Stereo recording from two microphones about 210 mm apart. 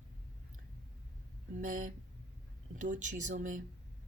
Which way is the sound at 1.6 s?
40° right (ahead or behind).